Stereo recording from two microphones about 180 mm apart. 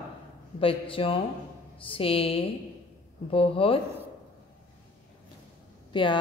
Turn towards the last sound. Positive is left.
turn(degrees=25)  # may be behind; listen again after turning